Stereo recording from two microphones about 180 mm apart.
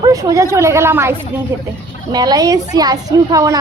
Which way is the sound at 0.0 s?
20° right (ahead or behind).